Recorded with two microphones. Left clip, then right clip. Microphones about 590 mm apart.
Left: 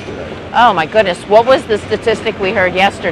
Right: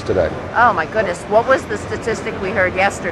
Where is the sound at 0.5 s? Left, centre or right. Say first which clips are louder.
Left 5 dB; left.